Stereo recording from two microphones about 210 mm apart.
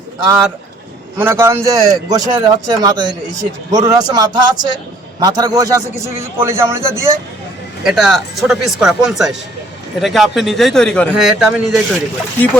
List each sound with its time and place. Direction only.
1.2 s a man's voice: 10° right (ahead or behind)